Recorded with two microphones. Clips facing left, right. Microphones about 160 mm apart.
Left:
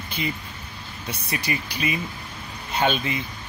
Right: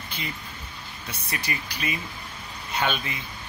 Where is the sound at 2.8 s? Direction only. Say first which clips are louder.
Left 5 dB; 25° left (ahead or behind).